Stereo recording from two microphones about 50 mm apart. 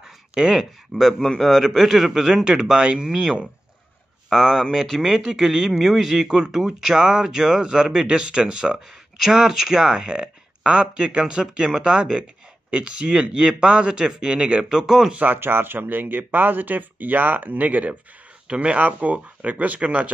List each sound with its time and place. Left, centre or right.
0.3 s speech: centre
1.4 s a man's voice: centre
4.3 s a man's voice: centre
14.8 s speech: centre
15.1 s speech: right